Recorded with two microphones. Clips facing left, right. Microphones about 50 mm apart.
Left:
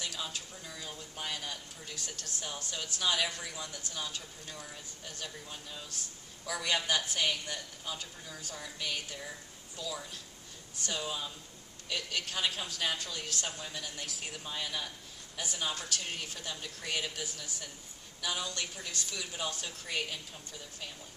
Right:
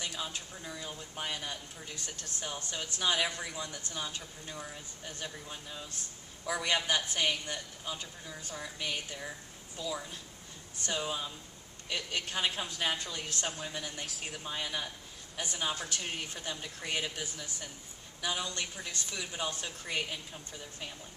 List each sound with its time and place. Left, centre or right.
0.7 s speech: centre
2.0 s speech: right
2.4 s speech: centre
14.0 s speech: centre
14.4 s speech: centre